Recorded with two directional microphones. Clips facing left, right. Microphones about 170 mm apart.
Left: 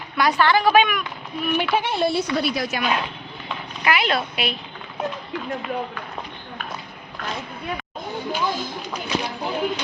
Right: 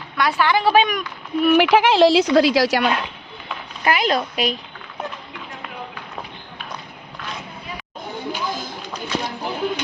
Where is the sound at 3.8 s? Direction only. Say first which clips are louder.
Right 2 dB; 40° right (ahead or behind).